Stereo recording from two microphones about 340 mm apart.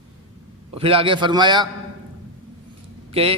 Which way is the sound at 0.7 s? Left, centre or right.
Centre.